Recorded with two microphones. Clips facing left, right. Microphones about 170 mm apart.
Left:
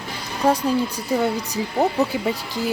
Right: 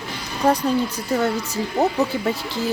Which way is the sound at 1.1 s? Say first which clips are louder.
Even; 10° left (ahead or behind).